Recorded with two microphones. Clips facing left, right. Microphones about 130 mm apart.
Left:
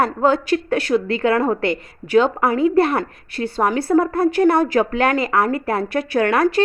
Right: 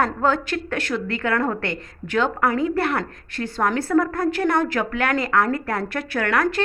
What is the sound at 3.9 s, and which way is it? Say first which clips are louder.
Speech: left 5 dB; 30° left (ahead or behind).